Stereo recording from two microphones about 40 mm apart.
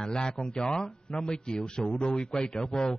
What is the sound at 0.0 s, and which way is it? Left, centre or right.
A man's voice, left.